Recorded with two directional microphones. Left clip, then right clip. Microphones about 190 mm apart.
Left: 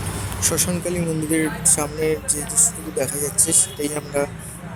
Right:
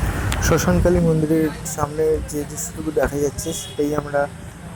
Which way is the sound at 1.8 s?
Centre (ahead or behind).